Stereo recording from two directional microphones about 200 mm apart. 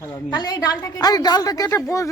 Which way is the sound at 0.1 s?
20° left (ahead or behind).